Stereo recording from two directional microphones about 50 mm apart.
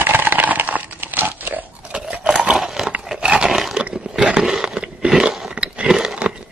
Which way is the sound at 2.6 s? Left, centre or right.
Centre.